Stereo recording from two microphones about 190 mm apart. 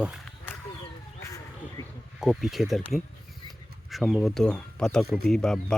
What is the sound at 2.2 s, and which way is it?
Speech, centre (ahead or behind).